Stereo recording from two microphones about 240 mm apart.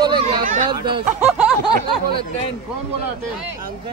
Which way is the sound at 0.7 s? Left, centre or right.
Centre.